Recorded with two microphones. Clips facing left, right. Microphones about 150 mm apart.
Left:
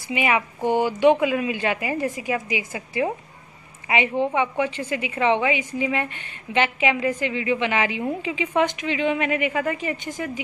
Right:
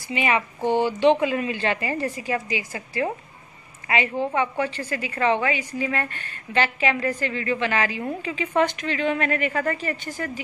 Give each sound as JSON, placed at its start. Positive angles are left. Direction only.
{"t": 0.1, "sound": "a woman's voice", "side_deg": 10}